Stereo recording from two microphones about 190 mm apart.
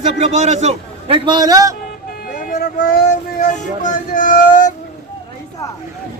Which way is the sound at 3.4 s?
45° left (ahead or behind).